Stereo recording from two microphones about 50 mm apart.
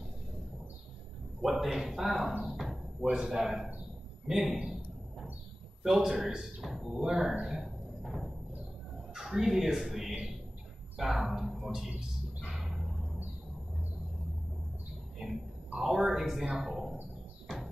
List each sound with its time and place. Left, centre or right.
1.4 s a man's voice: centre
2.6 s a sound: centre
3.1 s a man's voice: centre
5.9 s speech: centre
6.1 s speech: centre
6.4 s speech: centre
7.4 s music: centre
9.1 s speech: centre
12.5 s a sound: centre
15.2 s a sound: centre
15.8 s a man's voice: centre
17.5 s music: centre